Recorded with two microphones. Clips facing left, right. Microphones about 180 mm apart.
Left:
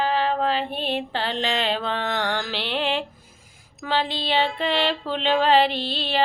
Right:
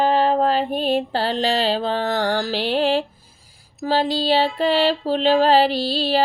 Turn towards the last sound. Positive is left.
turn(degrees=-40)  # may be behind; listen again after turning